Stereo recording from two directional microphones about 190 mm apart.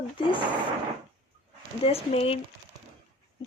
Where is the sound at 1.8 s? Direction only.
30° left (ahead or behind).